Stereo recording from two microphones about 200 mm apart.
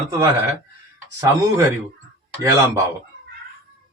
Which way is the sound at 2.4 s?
15° right (ahead or behind).